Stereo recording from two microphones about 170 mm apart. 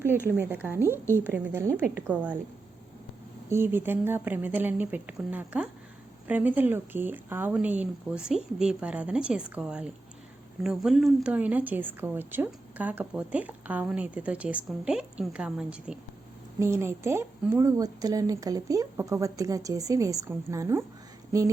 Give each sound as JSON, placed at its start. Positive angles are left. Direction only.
{"t": 0.0, "sound": "a woman's voice", "side_deg": -15}
{"t": 3.5, "sound": "a woman's voice", "side_deg": -15}
{"t": 16.6, "sound": "a woman's voice", "side_deg": -15}